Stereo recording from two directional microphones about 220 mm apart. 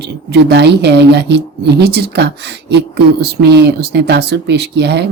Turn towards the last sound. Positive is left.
turn(degrees=-50)  # may be behind; listen again after turning